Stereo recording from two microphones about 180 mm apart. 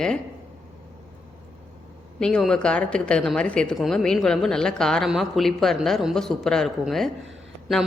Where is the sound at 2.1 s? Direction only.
5° left (ahead or behind).